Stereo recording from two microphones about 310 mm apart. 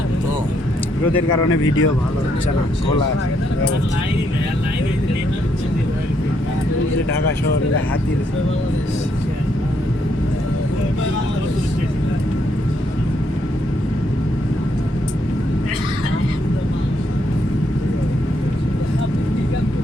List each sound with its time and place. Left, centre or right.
1.5 s speech: left